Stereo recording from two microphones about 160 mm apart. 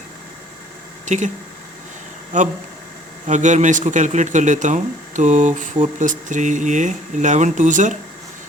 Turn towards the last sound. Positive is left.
turn(degrees=-50)  # may be behind; listen again after turning